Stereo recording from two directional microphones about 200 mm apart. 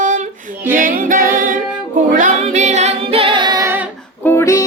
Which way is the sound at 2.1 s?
40° right (ahead or behind).